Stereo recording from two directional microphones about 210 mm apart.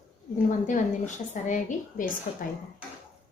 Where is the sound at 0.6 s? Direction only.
35° left (ahead or behind).